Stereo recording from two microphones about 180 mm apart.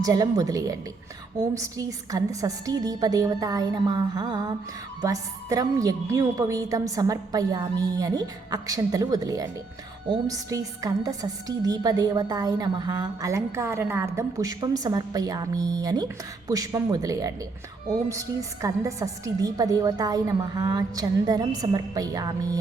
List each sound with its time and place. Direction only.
0.0 s a woman's voice: 20° right (ahead or behind)